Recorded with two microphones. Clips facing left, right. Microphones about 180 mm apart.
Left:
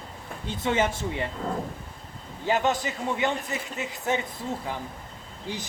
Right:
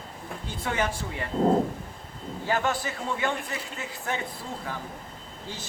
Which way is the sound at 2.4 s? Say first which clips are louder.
Left 3 dB; 20° left (ahead or behind).